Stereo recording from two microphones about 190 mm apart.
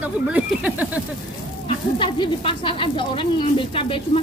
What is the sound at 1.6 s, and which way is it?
Speech, 25° left (ahead or behind).